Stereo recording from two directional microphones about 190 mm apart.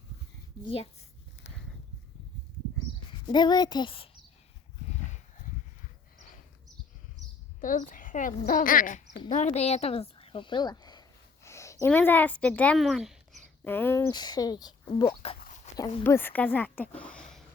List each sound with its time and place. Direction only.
1.5 s a sound: 70° left (ahead or behind)
3.2 s speech: 25° left (ahead or behind)
7.6 s a woman's voice: 45° left (ahead or behind); by 11.0 s 20° left (ahead or behind)
11.4 s a sound: 15° left (ahead or behind)
11.9 s speech: 10° left (ahead or behind)
13.7 s speech: 10° left (ahead or behind)
15.4 s dog: 40° left (ahead or behind)
16.0 s speech: 10° left (ahead or behind)